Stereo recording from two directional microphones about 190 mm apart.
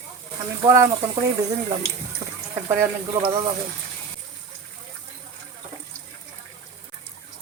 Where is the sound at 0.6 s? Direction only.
15° right (ahead or behind).